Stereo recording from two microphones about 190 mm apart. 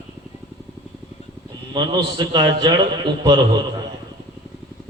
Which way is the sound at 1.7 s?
25° right (ahead or behind).